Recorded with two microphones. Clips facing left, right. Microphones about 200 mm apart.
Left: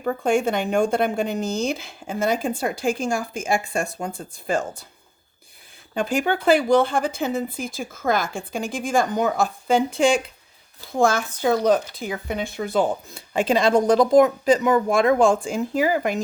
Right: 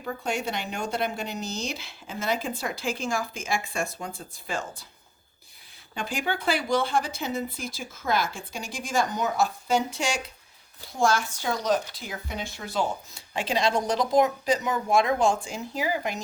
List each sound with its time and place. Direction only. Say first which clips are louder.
0.0 s speech: left 9 dB; 55° left (ahead or behind)
5.9 s speech: left 8 dB; 50° left (ahead or behind)